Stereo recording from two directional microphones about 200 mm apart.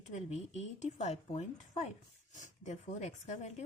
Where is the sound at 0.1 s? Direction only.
35° left (ahead or behind).